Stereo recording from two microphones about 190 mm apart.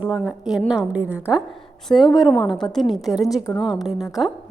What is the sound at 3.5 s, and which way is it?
Speech, 20° left (ahead or behind).